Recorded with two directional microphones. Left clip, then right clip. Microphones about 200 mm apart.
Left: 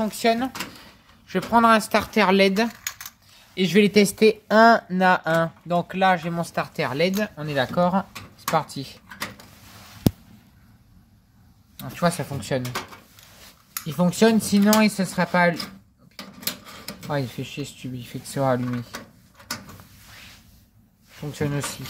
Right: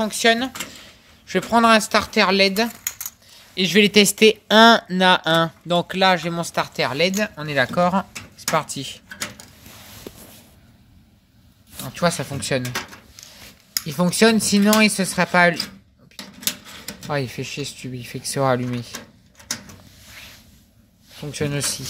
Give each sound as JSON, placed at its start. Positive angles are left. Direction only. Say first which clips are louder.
{"t": 0.0, "sound": "speech", "louder": "right 4 dB", "side_deg": 5}
{"t": 3.5, "sound": "speech", "louder": "right 3 dB", "side_deg": 10}
{"t": 3.9, "sound": "speech", "louder": "right 3 dB", "side_deg": 0}
{"t": 11.7, "sound": "speech", "louder": "right 3 dB", "side_deg": -5}
{"t": 13.7, "sound": "speech", "louder": "right 3 dB", "side_deg": -10}
{"t": 17.1, "sound": "speech", "louder": "right 3 dB", "side_deg": -15}
{"t": 18.3, "sound": "speech", "louder": "right 3 dB", "side_deg": -30}
{"t": 21.2, "sound": "speech", "louder": "right 3 dB", "side_deg": -10}